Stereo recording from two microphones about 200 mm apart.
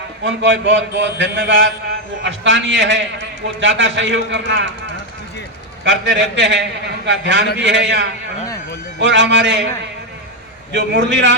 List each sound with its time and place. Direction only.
0.3 s a man's voice: 65° right (ahead or behind)
5.8 s a man's voice: 65° right (ahead or behind)
10.7 s a man's voice: 65° right (ahead or behind)